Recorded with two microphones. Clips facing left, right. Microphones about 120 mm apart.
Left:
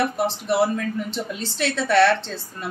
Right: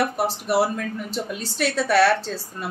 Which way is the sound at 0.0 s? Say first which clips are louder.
Even; 10° right (ahead or behind).